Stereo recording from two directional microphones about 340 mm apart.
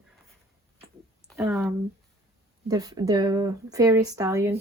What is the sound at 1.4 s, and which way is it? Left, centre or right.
Speech, centre.